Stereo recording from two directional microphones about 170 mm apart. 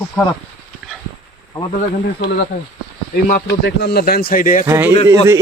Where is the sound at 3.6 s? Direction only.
70° left (ahead or behind); by 4.7 s 50° left (ahead or behind).